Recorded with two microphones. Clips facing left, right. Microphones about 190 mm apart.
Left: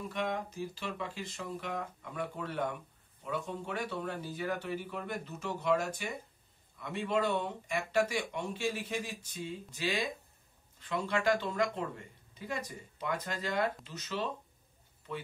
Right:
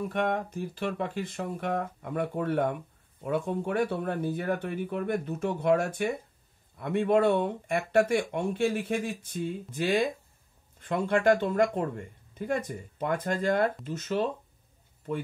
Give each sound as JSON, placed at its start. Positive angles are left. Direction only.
{"t": 0.1, "sound": "speech", "side_deg": -55}